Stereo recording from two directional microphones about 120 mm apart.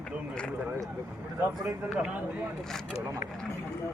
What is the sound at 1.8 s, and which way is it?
Speech, 5° right (ahead or behind).